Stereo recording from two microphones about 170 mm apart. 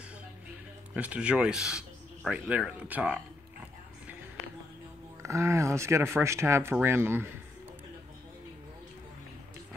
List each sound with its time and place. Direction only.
0.9 s speech: 5° right (ahead or behind)
5.2 s speech: 15° right (ahead or behind)